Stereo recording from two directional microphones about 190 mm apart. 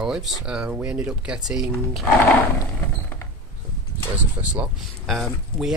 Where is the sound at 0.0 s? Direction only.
5° right (ahead or behind).